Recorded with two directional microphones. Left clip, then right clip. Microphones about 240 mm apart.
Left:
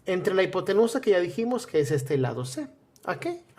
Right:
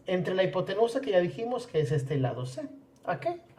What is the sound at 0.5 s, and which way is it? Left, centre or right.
Speech, left.